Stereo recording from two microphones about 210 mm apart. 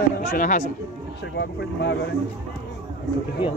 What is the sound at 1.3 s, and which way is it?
Speech, 55° left (ahead or behind).